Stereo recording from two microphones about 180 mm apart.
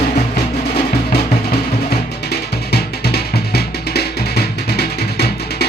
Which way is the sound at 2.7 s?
60° left (ahead or behind).